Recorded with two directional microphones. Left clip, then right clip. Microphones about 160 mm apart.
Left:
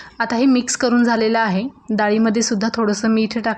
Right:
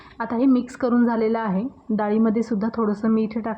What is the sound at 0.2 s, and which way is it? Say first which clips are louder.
A woman's voice: left 4 dB; 20° left (ahead or behind).